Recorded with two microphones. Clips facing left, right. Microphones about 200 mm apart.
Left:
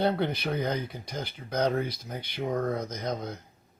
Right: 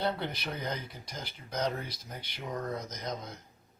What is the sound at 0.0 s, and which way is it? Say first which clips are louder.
Speech: left 6 dB; 55° left (ahead or behind).